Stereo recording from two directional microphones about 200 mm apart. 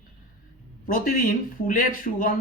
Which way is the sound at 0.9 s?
45° left (ahead or behind).